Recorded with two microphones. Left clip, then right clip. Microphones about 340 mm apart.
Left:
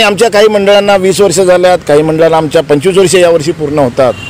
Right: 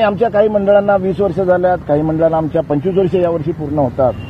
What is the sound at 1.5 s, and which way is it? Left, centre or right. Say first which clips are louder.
Speech: left 8 dB; left.